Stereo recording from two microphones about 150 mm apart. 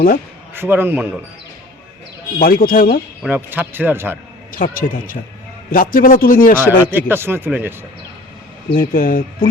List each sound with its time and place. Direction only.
0.5 s speech: 15° right (ahead or behind)
2.4 s a man's voice: 70° left (ahead or behind)
3.2 s speech: 10° right (ahead or behind)
4.5 s a man's voice: 65° left (ahead or behind)
6.9 s speech: 15° right (ahead or behind)
8.7 s a man's voice: 70° left (ahead or behind)